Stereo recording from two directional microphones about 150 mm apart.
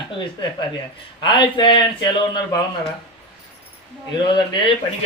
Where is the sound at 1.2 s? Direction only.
30° left (ahead or behind).